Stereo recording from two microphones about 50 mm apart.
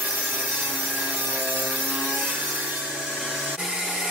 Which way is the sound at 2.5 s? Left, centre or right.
Right.